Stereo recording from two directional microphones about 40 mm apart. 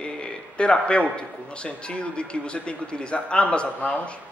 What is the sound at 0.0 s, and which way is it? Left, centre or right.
Mantra, left.